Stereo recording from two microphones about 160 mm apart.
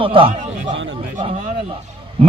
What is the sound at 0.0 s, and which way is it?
Speech, 35° right (ahead or behind).